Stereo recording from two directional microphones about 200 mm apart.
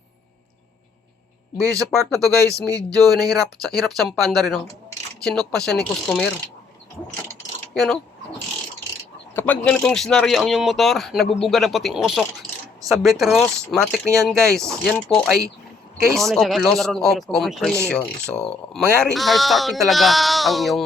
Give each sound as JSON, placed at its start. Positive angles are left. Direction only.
{"t": 1.5, "sound": "speech", "side_deg": -15}
{"t": 3.8, "sound": "speech", "side_deg": 0}
{"t": 7.7, "sound": "speech", "side_deg": 0}
{"t": 9.3, "sound": "speech", "side_deg": 10}